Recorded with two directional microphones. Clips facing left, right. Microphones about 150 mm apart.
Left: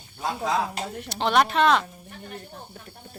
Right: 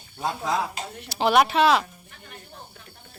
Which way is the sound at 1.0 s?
5° right (ahead or behind).